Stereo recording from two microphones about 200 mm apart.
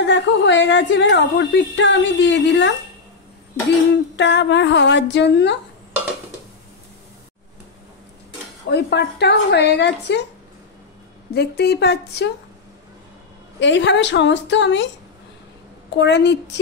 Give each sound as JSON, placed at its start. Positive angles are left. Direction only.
{"t": 0.0, "sound": "a woman's voice", "side_deg": 65}
{"t": 3.9, "sound": "a woman's voice", "side_deg": 60}
{"t": 8.6, "sound": "a woman's voice", "side_deg": 55}
{"t": 11.3, "sound": "a woman's voice", "side_deg": 55}
{"t": 13.6, "sound": "a woman's voice", "side_deg": 65}
{"t": 16.0, "sound": "a woman's voice", "side_deg": 60}